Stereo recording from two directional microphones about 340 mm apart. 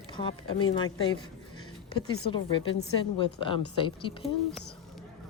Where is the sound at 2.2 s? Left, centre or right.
Centre.